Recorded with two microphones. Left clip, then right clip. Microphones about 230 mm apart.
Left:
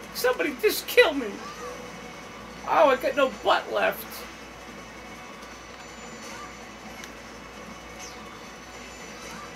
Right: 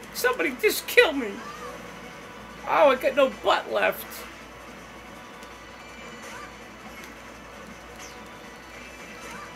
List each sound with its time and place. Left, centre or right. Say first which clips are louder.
0.1 s speech: even; right
2.7 s speech: right 1 dB; right